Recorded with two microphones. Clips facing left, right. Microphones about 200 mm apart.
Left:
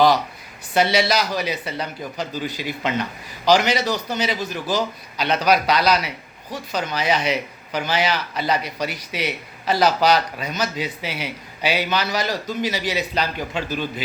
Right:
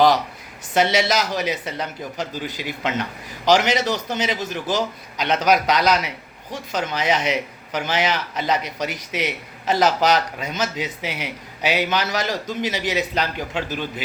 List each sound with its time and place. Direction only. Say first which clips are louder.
0.7 s a man's voice: even; 20° right (ahead or behind)